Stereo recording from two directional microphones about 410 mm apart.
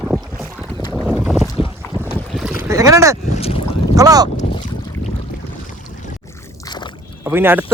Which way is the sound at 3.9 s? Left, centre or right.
Centre.